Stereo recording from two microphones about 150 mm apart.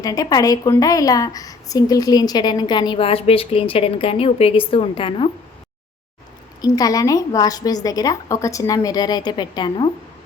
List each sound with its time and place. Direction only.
0.0 s a woman's voice: 25° left (ahead or behind)
6.6 s a woman's voice: 25° left (ahead or behind)